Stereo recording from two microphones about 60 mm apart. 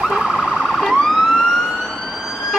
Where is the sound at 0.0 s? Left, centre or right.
Centre.